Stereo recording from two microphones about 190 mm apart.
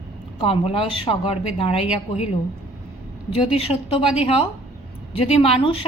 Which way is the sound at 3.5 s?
30° left (ahead or behind).